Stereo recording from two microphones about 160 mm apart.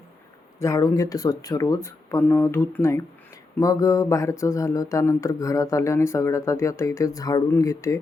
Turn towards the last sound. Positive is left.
turn(degrees=20)  # may be behind; listen again after turning